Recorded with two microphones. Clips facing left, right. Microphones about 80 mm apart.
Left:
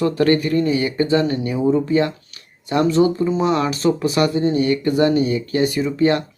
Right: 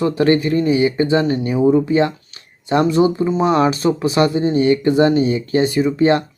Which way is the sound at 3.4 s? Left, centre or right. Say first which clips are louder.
Right 6 dB; right.